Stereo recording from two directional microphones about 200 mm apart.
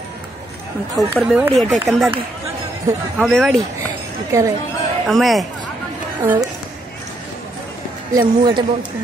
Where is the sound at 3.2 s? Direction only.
Centre (ahead or behind).